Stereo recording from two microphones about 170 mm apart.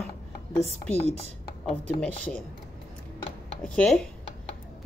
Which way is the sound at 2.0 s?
5° left (ahead or behind).